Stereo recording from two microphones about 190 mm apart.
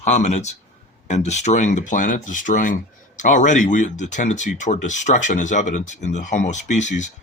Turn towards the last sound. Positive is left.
turn(degrees=40)  # may be behind; listen again after turning